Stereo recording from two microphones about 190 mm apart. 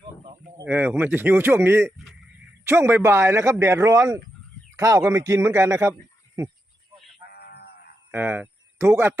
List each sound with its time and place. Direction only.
0.7 s speech: 10° right (ahead or behind)
7.3 s livestock: 55° left (ahead or behind)
8.1 s speech: 10° right (ahead or behind)